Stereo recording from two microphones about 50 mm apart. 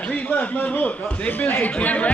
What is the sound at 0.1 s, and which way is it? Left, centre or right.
Speech, left.